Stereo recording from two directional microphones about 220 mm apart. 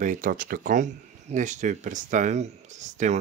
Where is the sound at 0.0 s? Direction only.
35° right (ahead or behind).